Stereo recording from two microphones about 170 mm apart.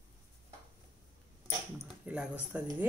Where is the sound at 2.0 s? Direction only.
5° right (ahead or behind).